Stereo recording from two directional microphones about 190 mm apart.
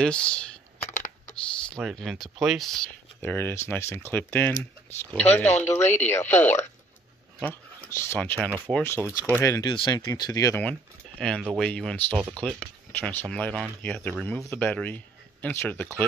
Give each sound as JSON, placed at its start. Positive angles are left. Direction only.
{"t": 0.0, "sound": "speech", "side_deg": 5}
{"t": 0.8, "sound": "computer keyboard", "side_deg": 40}
{"t": 1.3, "sound": "speech", "side_deg": 0}
{"t": 5.5, "sound": "speech", "side_deg": 35}
{"t": 7.9, "sound": "speech", "side_deg": 15}
{"t": 10.6, "sound": "speech", "side_deg": 5}